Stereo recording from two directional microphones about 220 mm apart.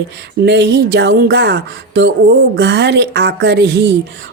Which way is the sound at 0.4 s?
50° right (ahead or behind).